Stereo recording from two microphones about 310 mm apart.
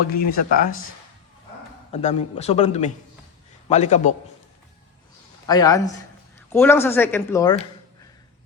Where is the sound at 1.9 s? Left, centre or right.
Centre.